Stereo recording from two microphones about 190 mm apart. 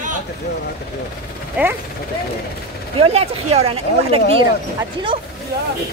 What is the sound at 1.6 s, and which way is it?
Speech, 10° right (ahead or behind).